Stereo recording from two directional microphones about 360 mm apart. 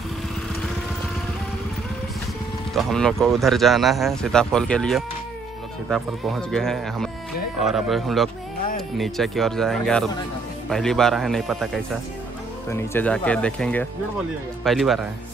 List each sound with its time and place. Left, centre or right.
2.7 s speech: centre